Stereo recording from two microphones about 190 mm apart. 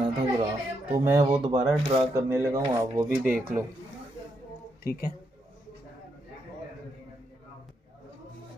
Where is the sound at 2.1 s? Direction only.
15° right (ahead or behind).